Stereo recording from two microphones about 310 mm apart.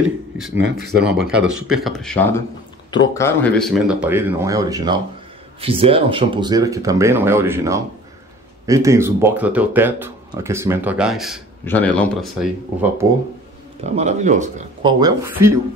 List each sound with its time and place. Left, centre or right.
0.6 s speech: right
1.0 s speech: centre
13.8 s speech: right